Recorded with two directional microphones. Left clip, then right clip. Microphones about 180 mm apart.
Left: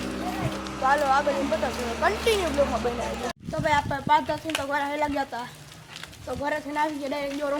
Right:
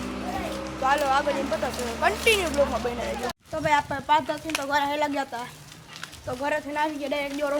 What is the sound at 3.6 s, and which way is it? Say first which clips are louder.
Speech: even; centre (ahead or behind).